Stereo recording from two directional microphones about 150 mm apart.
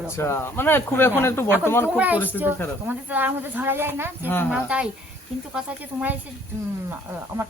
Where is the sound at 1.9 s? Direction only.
10° right (ahead or behind).